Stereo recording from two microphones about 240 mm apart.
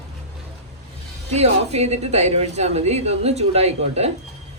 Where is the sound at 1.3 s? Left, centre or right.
Right.